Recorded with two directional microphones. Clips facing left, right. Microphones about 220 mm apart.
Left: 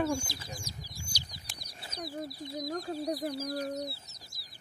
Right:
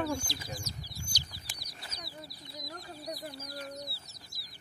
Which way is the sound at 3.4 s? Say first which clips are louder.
Left 8 dB; 45° left (ahead or behind).